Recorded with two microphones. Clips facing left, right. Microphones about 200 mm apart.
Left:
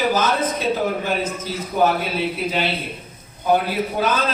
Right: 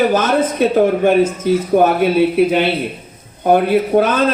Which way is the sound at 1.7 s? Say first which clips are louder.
Right 6 dB; 55° right (ahead or behind).